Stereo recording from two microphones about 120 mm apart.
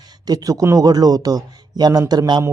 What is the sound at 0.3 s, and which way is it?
A man's voice, 30° right (ahead or behind).